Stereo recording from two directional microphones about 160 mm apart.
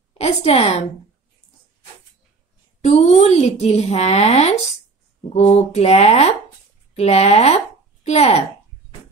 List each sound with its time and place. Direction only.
0.2 s a woman's voice: 40° left (ahead or behind)
2.8 s a woman's voice: 45° left (ahead or behind)